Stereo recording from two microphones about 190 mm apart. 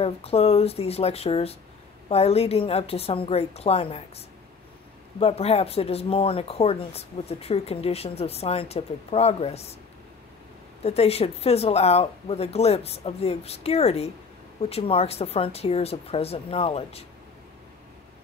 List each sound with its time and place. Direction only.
0.0 s speech: 30° left (ahead or behind)
5.2 s speech: 30° left (ahead or behind)
10.8 s speech: 35° left (ahead or behind)